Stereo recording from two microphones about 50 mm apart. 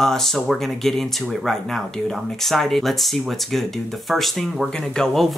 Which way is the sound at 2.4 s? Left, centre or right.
Centre.